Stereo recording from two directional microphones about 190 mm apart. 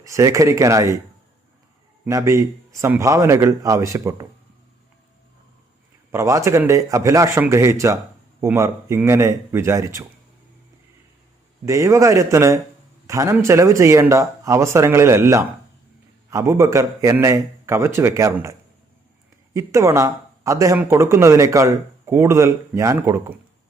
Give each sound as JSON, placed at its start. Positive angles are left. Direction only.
{"t": 0.0, "sound": "speech", "side_deg": -15}
{"t": 2.0, "sound": "speech", "side_deg": -15}
{"t": 6.1, "sound": "speech", "side_deg": -15}
{"t": 11.6, "sound": "speech", "side_deg": -15}
{"t": 19.5, "sound": "speech", "side_deg": -15}